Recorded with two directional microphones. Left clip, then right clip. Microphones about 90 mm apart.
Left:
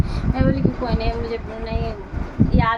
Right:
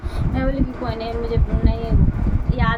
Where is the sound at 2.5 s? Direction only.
5° left (ahead or behind).